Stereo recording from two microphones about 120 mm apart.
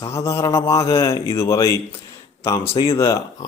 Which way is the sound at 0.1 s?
20° left (ahead or behind).